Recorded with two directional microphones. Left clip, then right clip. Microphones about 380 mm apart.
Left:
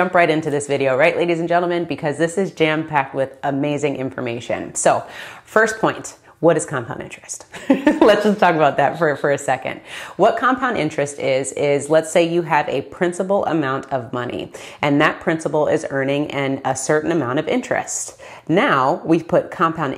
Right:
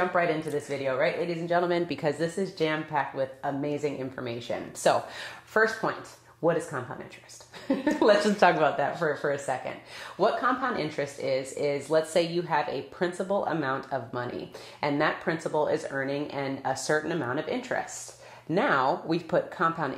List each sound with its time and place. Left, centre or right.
0.1 s speech: left
1.6 s a woman's voice: left
2.3 s speech: left
5.5 s a woman's voice: left
8.6 s a woman's voice: left